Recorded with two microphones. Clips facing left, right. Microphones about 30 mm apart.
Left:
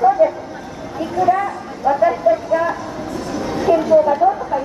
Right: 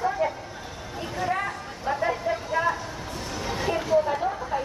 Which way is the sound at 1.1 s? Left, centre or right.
Centre.